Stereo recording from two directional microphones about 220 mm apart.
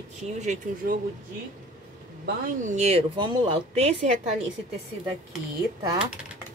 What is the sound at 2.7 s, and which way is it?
Speech, 30° right (ahead or behind).